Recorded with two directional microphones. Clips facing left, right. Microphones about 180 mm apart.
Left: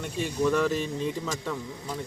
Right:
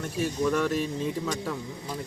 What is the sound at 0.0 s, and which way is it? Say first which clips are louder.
Speech: even; centre (ahead or behind).